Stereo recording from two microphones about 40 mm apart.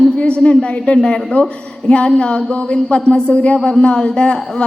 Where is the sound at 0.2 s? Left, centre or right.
Left.